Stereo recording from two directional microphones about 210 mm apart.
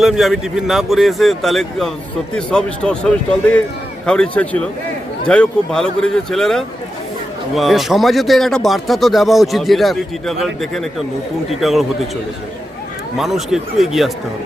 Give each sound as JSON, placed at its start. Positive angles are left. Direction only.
{"t": 0.0, "sound": "speech", "side_deg": 0}
{"t": 13.1, "sound": "speech", "side_deg": 0}